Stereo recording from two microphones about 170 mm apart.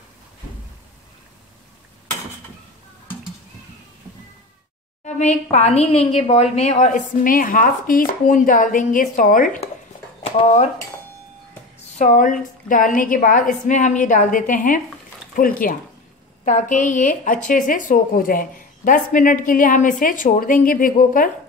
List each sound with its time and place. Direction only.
5.0 s speech: 45° left (ahead or behind)
12.0 s speech: 50° left (ahead or behind)